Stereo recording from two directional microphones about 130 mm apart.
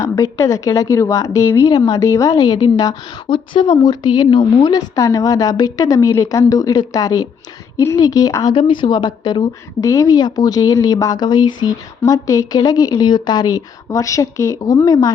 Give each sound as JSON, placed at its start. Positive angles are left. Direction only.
{"t": 0.0, "sound": "speech", "side_deg": 25}
{"t": 4.7, "sound": "speech", "side_deg": 25}
{"t": 8.5, "sound": "speech", "side_deg": 40}